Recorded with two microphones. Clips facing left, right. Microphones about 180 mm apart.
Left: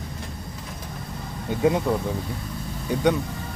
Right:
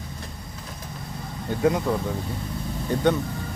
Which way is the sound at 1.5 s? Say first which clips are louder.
Left 1 dB; 20° left (ahead or behind).